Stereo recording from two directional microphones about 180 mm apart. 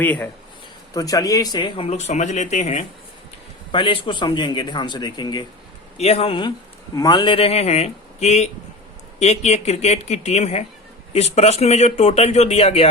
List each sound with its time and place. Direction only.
0.0 s speech: 10° left (ahead or behind); by 2.8 s 40° left (ahead or behind)
3.7 s a man's voice: 25° left (ahead or behind)
6.0 s speech: 35° left (ahead or behind)